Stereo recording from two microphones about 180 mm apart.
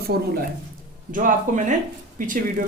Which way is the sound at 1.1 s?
45° right (ahead or behind).